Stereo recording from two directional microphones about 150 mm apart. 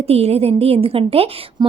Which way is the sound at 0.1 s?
45° right (ahead or behind).